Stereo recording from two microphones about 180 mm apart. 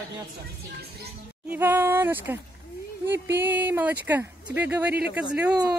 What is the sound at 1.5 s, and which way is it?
Speech, 10° right (ahead or behind).